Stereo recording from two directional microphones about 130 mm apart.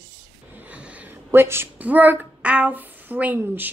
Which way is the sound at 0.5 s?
10° right (ahead or behind).